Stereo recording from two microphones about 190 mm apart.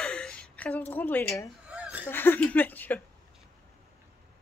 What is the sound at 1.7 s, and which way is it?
Chuckle, 5° right (ahead or behind).